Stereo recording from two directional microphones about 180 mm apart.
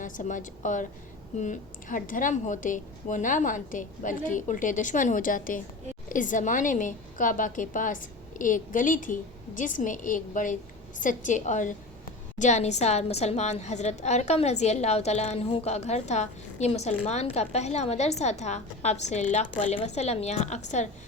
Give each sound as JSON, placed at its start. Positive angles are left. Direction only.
{"t": 0.0, "sound": "a woman's voice", "side_deg": 45}